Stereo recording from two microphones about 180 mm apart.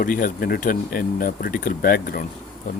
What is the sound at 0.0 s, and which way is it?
Speech, 50° left (ahead or behind).